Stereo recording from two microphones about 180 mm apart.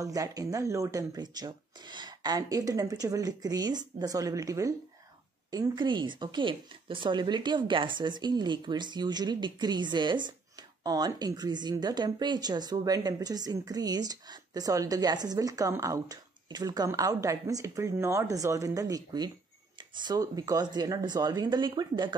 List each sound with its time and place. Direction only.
0.0 s a woman's voice: 20° right (ahead or behind)